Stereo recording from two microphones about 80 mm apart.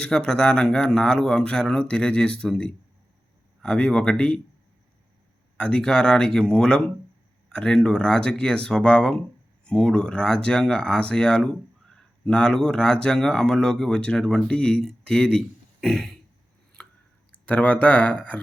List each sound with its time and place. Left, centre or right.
0.0 s speech: centre
5.5 s speech: centre
16.8 s chopping: centre
17.3 s speech: centre